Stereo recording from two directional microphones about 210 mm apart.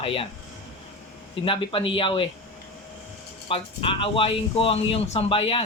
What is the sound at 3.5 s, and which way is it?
Speech, 25° left (ahead or behind).